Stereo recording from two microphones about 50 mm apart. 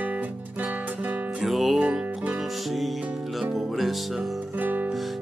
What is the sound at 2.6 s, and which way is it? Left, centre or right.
Music, centre.